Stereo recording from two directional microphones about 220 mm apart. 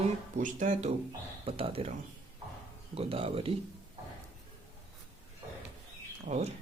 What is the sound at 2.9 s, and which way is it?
Speech, 25° right (ahead or behind).